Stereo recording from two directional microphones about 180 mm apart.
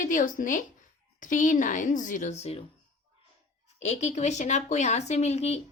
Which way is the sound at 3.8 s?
40° left (ahead or behind).